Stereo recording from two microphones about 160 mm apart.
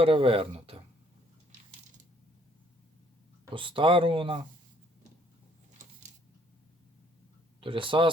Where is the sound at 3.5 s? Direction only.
30° right (ahead or behind).